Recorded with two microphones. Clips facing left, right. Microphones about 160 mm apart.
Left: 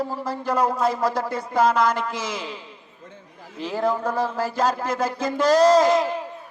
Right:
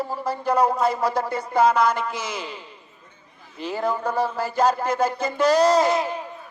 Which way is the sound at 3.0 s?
85° left.